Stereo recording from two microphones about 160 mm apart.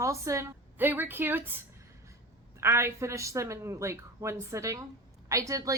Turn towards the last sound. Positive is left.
turn(degrees=-20)  # may be behind; listen again after turning